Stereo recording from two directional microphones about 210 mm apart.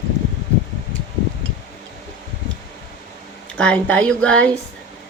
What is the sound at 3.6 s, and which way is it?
Speech, 5° left (ahead or behind).